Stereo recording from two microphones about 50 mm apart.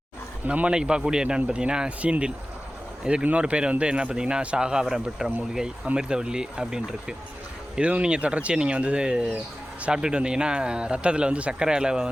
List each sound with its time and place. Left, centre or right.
0.4 s speech: right
0.7 s speech: centre
7.8 s speech: right